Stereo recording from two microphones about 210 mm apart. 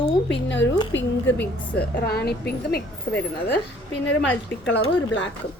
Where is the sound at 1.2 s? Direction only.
5° left (ahead or behind).